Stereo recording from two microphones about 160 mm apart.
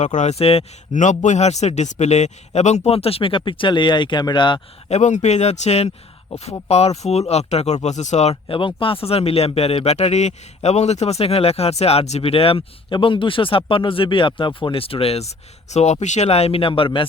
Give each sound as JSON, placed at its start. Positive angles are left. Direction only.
{"t": 0.0, "sound": "speech", "side_deg": 50}
{"t": 4.9, "sound": "speech", "side_deg": 45}